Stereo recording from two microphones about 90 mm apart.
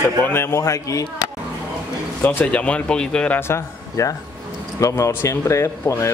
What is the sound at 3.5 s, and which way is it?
A man's voice, 35° left (ahead or behind).